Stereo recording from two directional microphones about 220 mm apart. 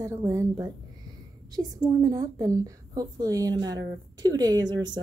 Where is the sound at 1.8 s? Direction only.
15° right (ahead or behind).